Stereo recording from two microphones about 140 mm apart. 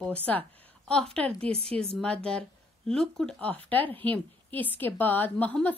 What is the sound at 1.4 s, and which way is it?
Speech, 45° right (ahead or behind).